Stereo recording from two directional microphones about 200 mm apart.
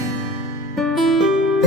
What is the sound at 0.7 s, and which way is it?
Music, centre (ahead or behind).